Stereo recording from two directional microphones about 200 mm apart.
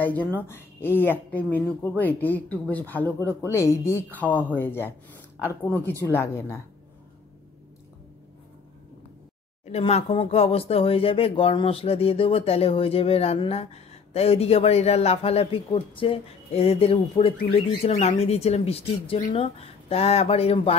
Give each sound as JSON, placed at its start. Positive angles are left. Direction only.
{"t": 0.0, "sound": "speech", "side_deg": 10}
{"t": 9.7, "sound": "speech", "side_deg": 30}